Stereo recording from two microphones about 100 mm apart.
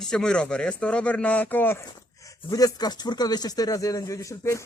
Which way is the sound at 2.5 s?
40° left (ahead or behind).